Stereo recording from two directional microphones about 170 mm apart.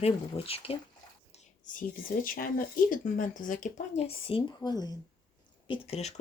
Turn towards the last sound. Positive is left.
turn(degrees=40)  # may be behind; listen again after turning